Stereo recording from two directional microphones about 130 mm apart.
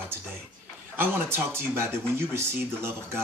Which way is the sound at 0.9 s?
20° right (ahead or behind).